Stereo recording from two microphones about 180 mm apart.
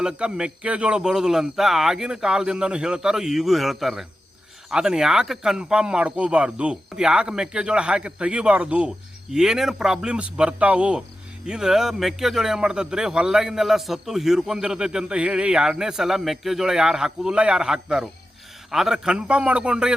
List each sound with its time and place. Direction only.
0.0 s a man's voice: 5° right (ahead or behind)